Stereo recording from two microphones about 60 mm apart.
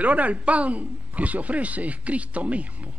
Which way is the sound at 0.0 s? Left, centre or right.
Right.